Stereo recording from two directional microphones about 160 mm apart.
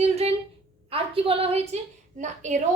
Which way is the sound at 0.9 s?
35° right (ahead or behind).